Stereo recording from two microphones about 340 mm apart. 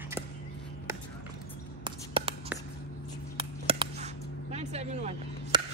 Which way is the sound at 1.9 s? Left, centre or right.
Centre.